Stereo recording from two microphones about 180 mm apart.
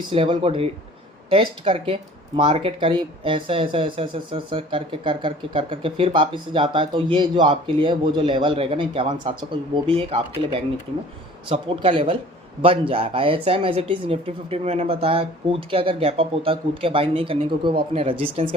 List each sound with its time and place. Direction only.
0.1 s speech: 30° right (ahead or behind)